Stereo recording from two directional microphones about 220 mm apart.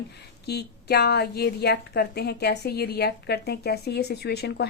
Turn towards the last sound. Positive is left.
turn(degrees=50)  # may be behind; listen again after turning